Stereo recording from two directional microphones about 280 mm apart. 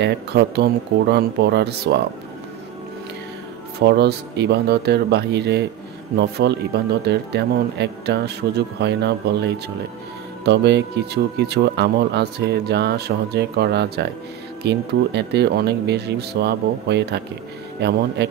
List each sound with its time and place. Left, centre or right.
0.0 s speech: right
3.8 s speech: right